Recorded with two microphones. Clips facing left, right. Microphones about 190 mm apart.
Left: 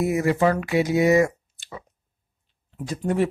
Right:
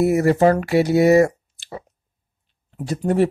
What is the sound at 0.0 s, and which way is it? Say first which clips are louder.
Speech: right 5 dB; 40° right (ahead or behind).